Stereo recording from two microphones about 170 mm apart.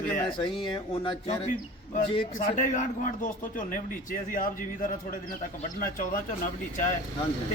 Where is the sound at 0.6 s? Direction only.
30° left (ahead or behind).